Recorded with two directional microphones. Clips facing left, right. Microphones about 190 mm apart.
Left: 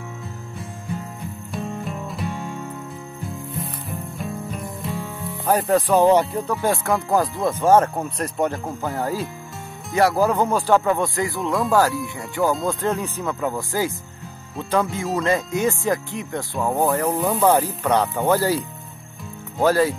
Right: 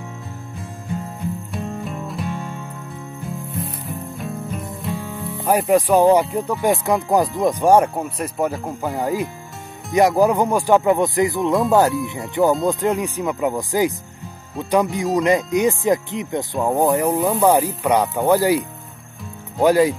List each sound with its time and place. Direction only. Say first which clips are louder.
1.5 s music: right 1 dB; centre (ahead or behind)
4.2 s music: even; centre (ahead or behind)
5.4 s speech: right 2 dB; 10° right (ahead or behind)